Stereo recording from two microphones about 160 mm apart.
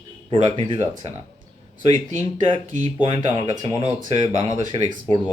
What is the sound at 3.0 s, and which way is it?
Speech, 40° right (ahead or behind).